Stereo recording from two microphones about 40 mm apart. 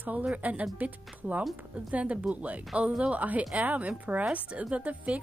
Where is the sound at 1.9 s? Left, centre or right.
Right.